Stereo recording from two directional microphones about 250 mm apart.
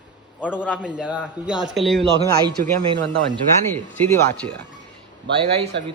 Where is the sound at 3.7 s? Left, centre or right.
Centre.